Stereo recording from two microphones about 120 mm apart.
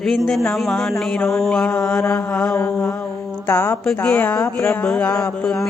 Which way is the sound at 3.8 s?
5° left (ahead or behind).